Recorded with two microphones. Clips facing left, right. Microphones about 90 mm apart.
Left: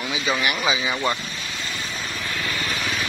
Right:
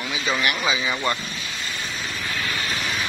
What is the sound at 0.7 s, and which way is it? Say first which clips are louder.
Speech: left 1 dB; 15° left (ahead or behind).